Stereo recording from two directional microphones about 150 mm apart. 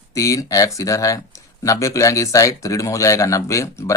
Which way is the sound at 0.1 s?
20° left (ahead or behind).